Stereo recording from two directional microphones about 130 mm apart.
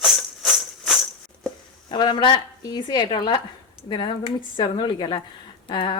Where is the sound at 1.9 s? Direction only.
35° left (ahead or behind).